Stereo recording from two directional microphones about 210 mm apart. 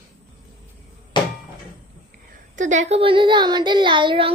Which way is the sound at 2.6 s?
35° right (ahead or behind).